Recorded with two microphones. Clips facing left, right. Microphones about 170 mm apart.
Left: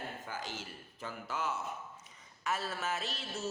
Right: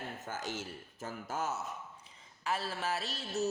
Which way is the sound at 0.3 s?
50° right (ahead or behind).